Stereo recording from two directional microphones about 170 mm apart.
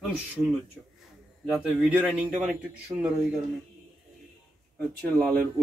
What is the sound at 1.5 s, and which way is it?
Speech, 5° right (ahead or behind).